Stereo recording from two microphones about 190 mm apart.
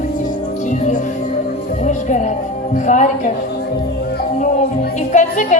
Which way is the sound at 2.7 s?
40° left (ahead or behind).